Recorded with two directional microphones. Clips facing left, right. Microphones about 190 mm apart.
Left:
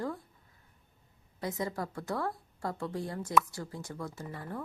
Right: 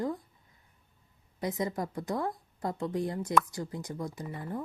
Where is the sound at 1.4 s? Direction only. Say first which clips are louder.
Right 3 dB; 20° right (ahead or behind).